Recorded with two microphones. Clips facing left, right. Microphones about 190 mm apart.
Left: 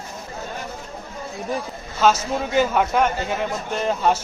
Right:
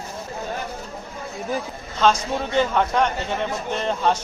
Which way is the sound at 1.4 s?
5° left (ahead or behind).